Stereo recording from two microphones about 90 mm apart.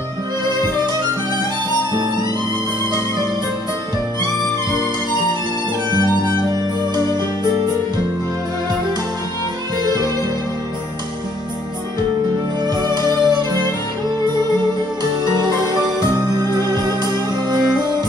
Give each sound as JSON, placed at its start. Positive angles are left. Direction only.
{"t": 12.6, "sound": "music", "side_deg": -50}
{"t": 15.4, "sound": "music", "side_deg": -50}